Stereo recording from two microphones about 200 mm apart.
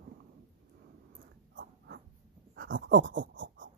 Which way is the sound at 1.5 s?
65° right (ahead or behind).